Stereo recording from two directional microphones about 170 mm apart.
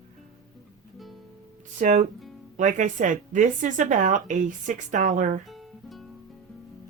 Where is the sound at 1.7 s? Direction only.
45° right (ahead or behind).